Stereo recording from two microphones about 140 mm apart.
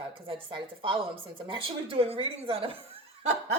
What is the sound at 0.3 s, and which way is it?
A woman's voice, 35° right (ahead or behind).